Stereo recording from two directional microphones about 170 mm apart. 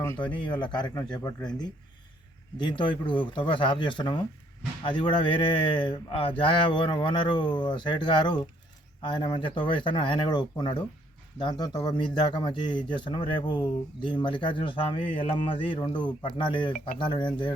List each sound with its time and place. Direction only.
0.3 s speech: 25° left (ahead or behind)